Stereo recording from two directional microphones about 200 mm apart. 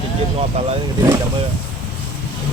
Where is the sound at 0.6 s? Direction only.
30° right (ahead or behind).